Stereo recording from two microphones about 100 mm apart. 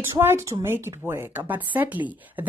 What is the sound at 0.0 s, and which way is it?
A woman's voice, 25° right (ahead or behind).